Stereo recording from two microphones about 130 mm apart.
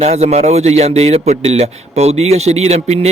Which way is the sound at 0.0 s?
55° right (ahead or behind).